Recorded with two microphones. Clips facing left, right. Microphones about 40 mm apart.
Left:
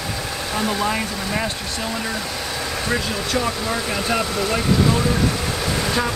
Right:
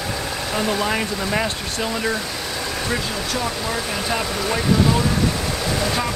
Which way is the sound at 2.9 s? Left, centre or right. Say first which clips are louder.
Left 2 dB; centre.